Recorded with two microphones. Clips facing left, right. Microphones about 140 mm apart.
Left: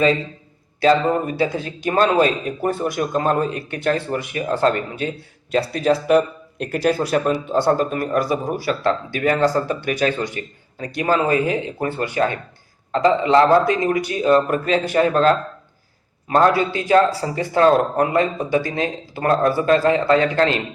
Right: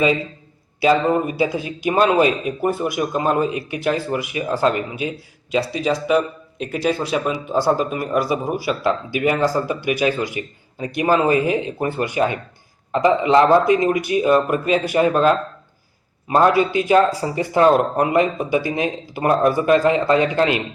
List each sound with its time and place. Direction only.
0.8 s speech: 10° right (ahead or behind)